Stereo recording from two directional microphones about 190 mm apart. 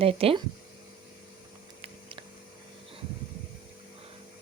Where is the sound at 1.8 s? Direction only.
30° right (ahead or behind).